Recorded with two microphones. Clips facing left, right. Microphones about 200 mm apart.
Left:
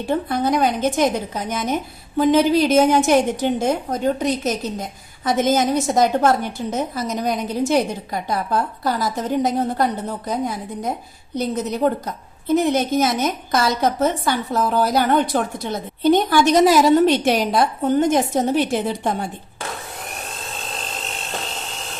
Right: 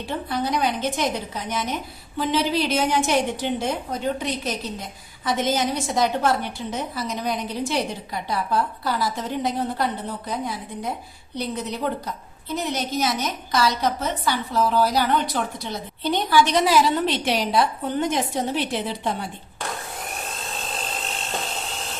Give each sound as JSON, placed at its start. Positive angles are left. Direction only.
{"t": 0.0, "sound": "a woman's voice", "side_deg": 45}